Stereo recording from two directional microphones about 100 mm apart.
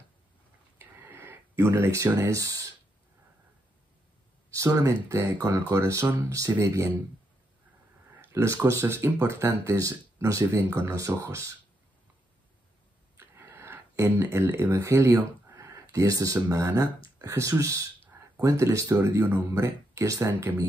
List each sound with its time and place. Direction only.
0.7 s a sound: 25° right (ahead or behind)
1.6 s speech: 30° right (ahead or behind)
4.5 s speech: 30° right (ahead or behind)
8.2 s speech: 25° right (ahead or behind)
13.2 s a sound: 25° right (ahead or behind)
15.5 s speech: 30° right (ahead or behind)